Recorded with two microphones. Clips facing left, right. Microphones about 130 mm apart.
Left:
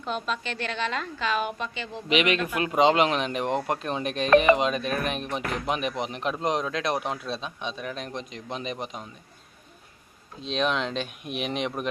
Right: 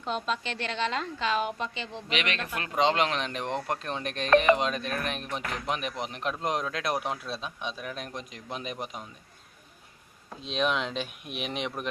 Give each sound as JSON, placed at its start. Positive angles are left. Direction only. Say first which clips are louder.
{"t": 0.0, "sound": "a woman's voice", "louder": "left 1 dB", "side_deg": -30}
{"t": 1.9, "sound": "a man's voice", "louder": "left 12 dB", "side_deg": 10}
{"t": 10.4, "sound": "speech", "louder": "left 2 dB", "side_deg": -5}